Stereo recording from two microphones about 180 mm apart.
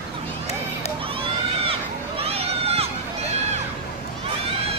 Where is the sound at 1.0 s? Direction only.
30° right (ahead or behind).